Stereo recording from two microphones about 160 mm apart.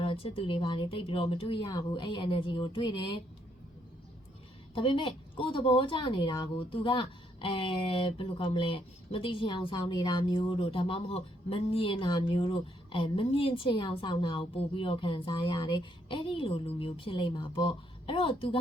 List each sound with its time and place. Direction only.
0.0 s a woman's voice: 35° left (ahead or behind)
4.7 s a woman's voice: 35° left (ahead or behind)